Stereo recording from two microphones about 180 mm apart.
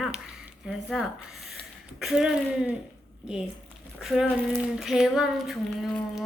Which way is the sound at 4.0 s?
Centre (ahead or behind).